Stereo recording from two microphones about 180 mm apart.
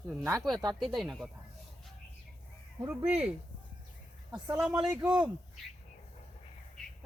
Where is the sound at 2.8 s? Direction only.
10° right (ahead or behind).